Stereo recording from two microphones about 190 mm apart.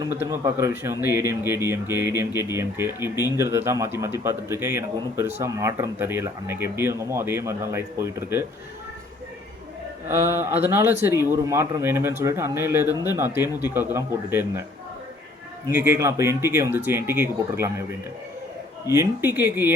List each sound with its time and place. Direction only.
0.0 s a man's voice: 10° right (ahead or behind)
10.1 s a man's voice: 10° right (ahead or behind)
12.8 s speech: 20° left (ahead or behind)
13.1 s a man's voice: 10° right (ahead or behind)
15.7 s a man's voice: 10° right (ahead or behind)
18.9 s a man's voice: 15° right (ahead or behind)